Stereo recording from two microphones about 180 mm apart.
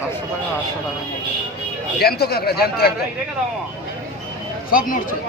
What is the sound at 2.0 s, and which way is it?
Speech, 60° left (ahead or behind).